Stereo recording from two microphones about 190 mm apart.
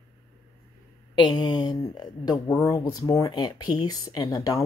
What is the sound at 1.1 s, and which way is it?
Speech, 25° left (ahead or behind).